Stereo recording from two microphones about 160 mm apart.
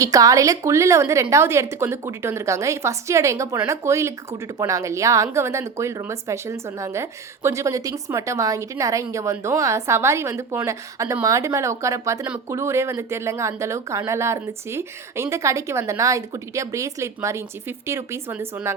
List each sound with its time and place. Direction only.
0.0 s a woman's voice: 20° right (ahead or behind)